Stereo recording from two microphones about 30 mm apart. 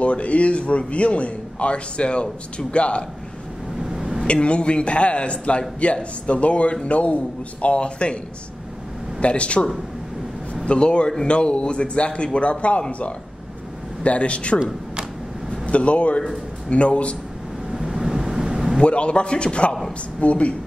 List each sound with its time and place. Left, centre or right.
0.0 s a man's voice: left
3.8 s a sound: centre
4.3 s a man's voice: left
9.2 s a man's voice: left
14.0 s a man's voice: left
15.6 s a man's voice: left
17.6 s vehicle: centre
18.8 s a man's voice: left
20.2 s a man's voice: left